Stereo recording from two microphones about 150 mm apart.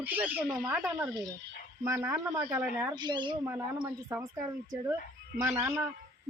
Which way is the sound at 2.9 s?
30° right (ahead or behind).